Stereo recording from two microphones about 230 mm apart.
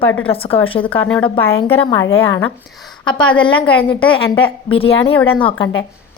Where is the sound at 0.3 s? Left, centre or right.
Left.